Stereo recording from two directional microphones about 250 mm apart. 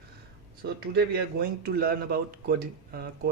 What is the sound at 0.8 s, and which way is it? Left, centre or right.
Speech, right.